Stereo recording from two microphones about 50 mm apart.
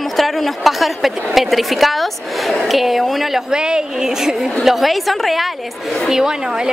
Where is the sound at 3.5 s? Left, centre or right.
Centre.